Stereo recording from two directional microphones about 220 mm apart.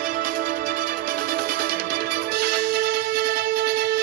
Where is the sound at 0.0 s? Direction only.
40° right (ahead or behind).